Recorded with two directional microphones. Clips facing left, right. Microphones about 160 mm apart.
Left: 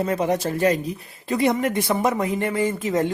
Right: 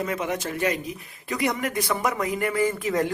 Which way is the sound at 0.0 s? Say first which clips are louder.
Left 6 dB; 35° left (ahead or behind).